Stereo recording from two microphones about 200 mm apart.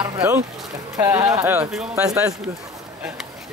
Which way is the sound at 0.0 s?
15° right (ahead or behind).